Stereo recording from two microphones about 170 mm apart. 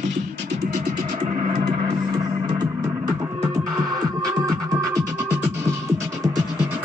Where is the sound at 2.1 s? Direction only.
25° right (ahead or behind).